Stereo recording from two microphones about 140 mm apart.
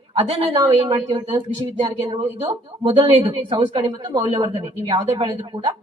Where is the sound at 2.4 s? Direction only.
45° right (ahead or behind).